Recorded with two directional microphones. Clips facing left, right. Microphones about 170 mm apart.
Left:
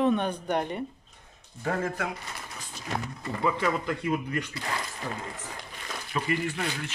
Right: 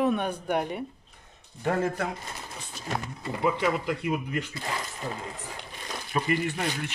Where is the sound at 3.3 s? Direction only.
15° right (ahead or behind).